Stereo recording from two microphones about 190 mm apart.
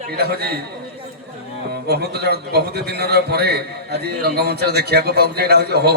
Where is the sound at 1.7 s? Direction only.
55° right (ahead or behind).